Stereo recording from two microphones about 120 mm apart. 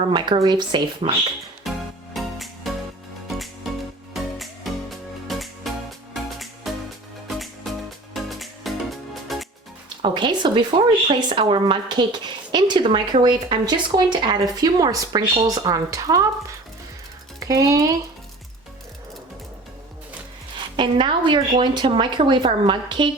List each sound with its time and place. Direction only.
0.1 s speech: 40° right (ahead or behind)
1.0 s speech: 60° right (ahead or behind)
1.7 s music: centre (ahead or behind)
10.0 s speech: 40° right (ahead or behind)
17.4 s speech: 30° right (ahead or behind)
20.7 s speech: 40° right (ahead or behind)